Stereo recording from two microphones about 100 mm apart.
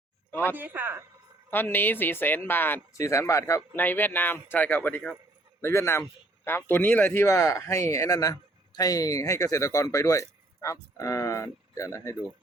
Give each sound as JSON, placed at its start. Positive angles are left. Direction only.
{"t": 0.3, "sound": "speech", "side_deg": 20}
{"t": 0.5, "sound": "speech", "side_deg": -20}
{"t": 1.5, "sound": "speech", "side_deg": 20}
{"t": 3.0, "sound": "speech", "side_deg": 30}
{"t": 3.8, "sound": "speech", "side_deg": 20}